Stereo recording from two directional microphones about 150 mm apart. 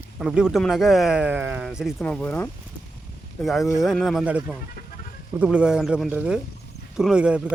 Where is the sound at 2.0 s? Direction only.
10° left (ahead or behind).